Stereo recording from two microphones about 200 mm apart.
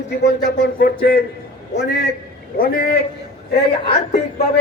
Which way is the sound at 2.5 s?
45° left (ahead or behind).